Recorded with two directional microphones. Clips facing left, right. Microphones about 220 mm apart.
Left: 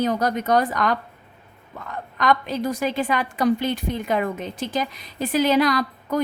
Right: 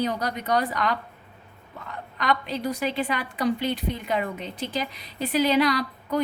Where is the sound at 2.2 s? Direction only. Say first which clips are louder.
Left 5 dB; 45° left (ahead or behind).